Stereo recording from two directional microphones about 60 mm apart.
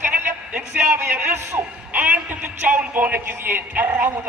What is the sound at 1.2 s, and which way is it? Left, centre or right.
Speech, right.